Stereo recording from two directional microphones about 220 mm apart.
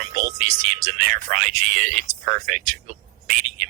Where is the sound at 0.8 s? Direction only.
35° right (ahead or behind).